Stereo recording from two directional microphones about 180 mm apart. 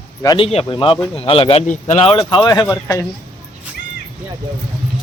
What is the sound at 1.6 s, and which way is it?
Speech, 45° left (ahead or behind).